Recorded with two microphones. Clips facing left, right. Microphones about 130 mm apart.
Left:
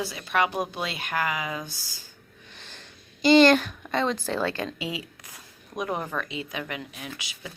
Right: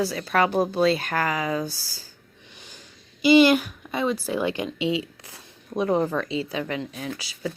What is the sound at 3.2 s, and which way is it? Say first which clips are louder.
Speech: right 1 dB; 10° right (ahead or behind).